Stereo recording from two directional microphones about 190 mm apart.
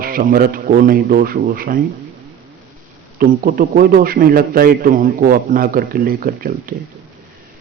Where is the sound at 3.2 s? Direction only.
50° right (ahead or behind).